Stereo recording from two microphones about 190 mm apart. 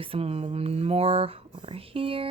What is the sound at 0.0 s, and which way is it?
Speech, 30° right (ahead or behind).